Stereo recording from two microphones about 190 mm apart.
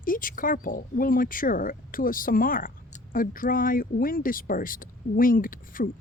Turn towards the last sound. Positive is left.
turn(degrees=45)  # may be behind; listen again after turning